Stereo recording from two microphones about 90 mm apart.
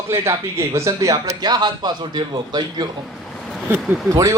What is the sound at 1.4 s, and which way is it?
A man's voice, 50° right (ahead or behind).